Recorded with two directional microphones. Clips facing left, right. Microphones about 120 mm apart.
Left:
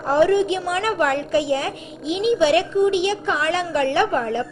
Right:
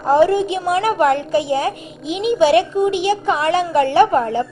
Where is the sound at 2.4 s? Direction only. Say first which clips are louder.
Right 4 dB; 40° right (ahead or behind).